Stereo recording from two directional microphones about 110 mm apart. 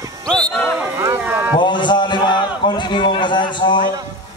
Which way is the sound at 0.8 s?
20° right (ahead or behind).